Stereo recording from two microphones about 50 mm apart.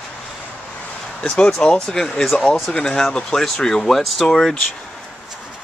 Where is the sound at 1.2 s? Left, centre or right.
Centre.